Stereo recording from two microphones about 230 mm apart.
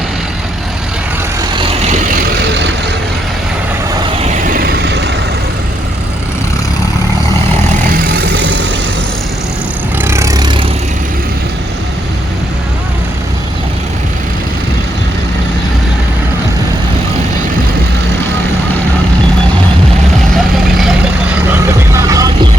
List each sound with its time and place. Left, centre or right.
4.4 s vehicle: right
8.1 s vehicle: right
10.0 s vehicle: centre
20.3 s vehicle: centre
21.9 s vehicle: centre